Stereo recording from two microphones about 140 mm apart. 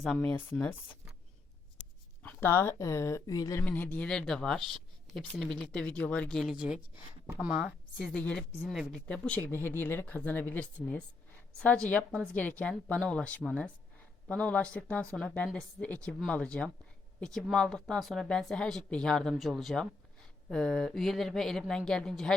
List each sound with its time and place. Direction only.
0.2 s speech: 10° left (ahead or behind)
2.2 s speech: 20° left (ahead or behind)
3.6 s speech: 15° left (ahead or behind)
6.3 s speech: centre (ahead or behind)
8.0 s speech: 10° left (ahead or behind)
9.0 s speech: 10° left (ahead or behind)